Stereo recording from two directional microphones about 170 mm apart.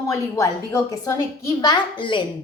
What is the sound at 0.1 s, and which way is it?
A woman's voice, 20° left (ahead or behind).